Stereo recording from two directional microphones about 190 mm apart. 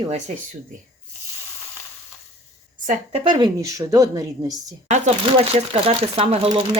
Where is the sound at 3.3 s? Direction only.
20° right (ahead or behind).